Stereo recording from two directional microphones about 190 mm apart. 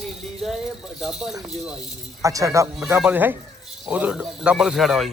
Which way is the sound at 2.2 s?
15° right (ahead or behind).